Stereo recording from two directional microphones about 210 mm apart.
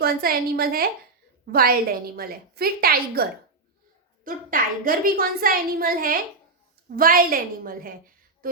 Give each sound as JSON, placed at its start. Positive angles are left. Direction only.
{"t": 0.0, "sound": "a woman's voice", "side_deg": -45}